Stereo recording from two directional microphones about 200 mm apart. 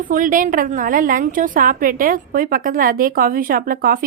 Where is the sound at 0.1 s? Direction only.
40° right (ahead or behind).